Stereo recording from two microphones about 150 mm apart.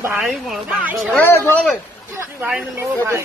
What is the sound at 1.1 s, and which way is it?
Speech, 15° left (ahead or behind).